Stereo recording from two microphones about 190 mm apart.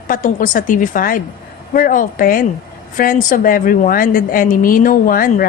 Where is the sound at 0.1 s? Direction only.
45° left (ahead or behind).